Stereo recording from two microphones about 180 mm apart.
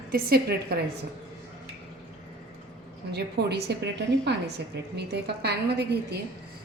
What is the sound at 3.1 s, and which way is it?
A woman's voice, 65° right (ahead or behind).